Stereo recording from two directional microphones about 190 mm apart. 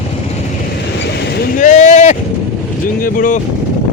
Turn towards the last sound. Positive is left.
turn(degrees=45)  # may be behind; listen again after turning